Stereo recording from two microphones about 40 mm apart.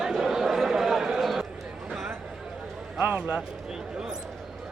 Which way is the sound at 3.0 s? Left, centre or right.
Right.